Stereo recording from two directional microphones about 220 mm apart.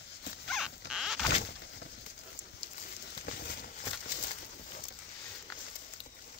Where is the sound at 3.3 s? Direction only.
45° left (ahead or behind).